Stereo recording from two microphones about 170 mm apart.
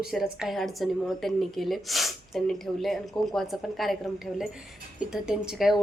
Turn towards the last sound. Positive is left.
turn(degrees=0)  # may be behind; listen again after turning